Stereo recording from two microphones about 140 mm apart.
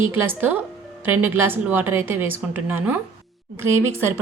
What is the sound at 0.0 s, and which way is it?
A woman's voice, 15° right (ahead or behind).